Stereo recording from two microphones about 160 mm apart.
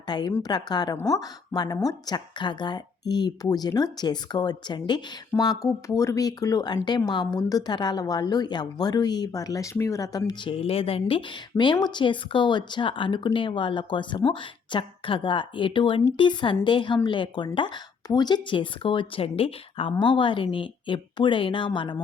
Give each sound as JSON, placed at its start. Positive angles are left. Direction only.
{"t": 0.3, "sound": "a woman's voice", "side_deg": 20}